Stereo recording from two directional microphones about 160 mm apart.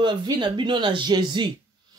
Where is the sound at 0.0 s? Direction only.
30° right (ahead or behind).